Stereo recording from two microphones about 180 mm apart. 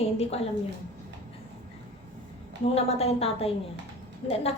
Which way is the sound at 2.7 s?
35° left (ahead or behind).